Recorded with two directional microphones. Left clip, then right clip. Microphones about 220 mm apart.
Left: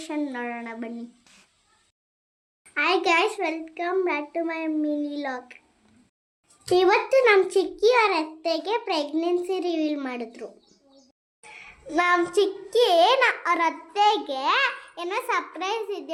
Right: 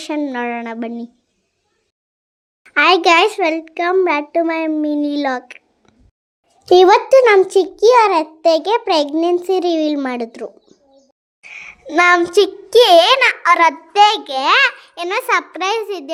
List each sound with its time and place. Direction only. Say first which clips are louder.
0.0 s a child's voice: right 9 dB; 30° right (ahead or behind)
2.7 s a child's voice: right 11 dB; 35° right (ahead or behind)
6.7 s a child's voice: right 11 dB; 30° right (ahead or behind); by 16.1 s 50° right (ahead or behind)